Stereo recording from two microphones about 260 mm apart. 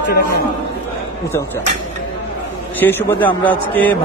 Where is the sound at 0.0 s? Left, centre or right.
Left.